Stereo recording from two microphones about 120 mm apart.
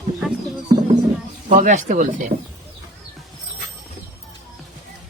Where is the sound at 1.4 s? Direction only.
90° right.